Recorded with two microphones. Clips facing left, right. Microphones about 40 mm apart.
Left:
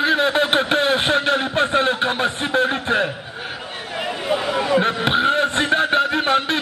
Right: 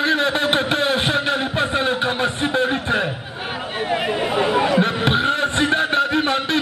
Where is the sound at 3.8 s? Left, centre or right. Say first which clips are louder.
Right 2 dB; centre.